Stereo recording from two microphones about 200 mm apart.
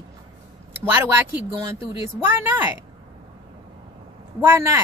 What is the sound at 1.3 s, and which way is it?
Speech, 15° right (ahead or behind).